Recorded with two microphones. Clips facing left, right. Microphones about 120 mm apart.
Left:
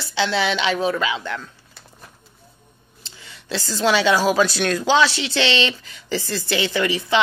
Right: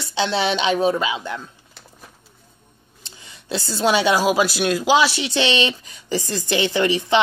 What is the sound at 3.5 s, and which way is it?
Speech, 15° right (ahead or behind).